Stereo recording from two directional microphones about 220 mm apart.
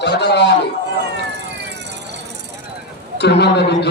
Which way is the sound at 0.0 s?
50° left (ahead or behind).